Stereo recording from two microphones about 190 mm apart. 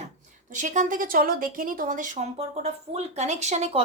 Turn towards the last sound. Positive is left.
turn(degrees=-35)  # may be behind; listen again after turning